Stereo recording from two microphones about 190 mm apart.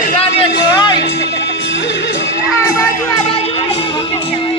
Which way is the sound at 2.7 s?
15° left (ahead or behind).